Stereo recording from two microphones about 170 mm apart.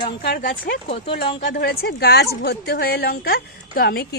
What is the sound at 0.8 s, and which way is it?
Speech, 35° left (ahead or behind).